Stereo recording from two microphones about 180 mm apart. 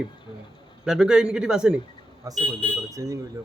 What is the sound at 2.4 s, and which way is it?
Speech, 30° right (ahead or behind).